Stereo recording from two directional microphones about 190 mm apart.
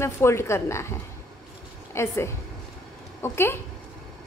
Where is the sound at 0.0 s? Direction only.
15° left (ahead or behind).